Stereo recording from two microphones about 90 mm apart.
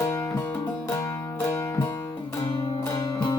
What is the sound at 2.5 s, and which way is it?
Music, 50° left (ahead or behind).